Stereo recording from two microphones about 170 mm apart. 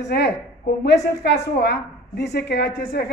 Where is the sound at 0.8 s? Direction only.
75° left (ahead or behind).